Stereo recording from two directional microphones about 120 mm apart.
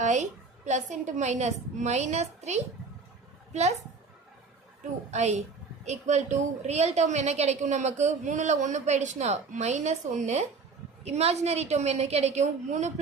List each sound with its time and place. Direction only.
0.0 s a woman's voice: 85° right; by 3.8 s 70° right (ahead or behind)
5.1 s a woman's voice: 70° right (ahead or behind)
11.0 s a woman's voice: 60° right (ahead or behind)